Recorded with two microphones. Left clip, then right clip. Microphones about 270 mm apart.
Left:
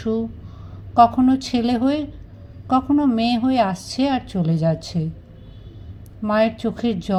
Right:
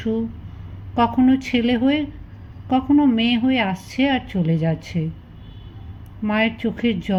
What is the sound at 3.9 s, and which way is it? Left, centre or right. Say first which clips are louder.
A woman's voice: right 2 dB; left.